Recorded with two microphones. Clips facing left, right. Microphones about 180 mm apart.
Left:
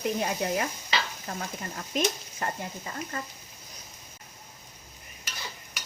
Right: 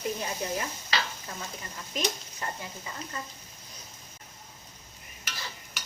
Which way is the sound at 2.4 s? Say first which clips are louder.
Left 4 dB; 55° left (ahead or behind).